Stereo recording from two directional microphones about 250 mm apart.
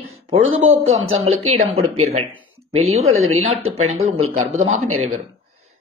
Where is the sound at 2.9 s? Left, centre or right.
Right.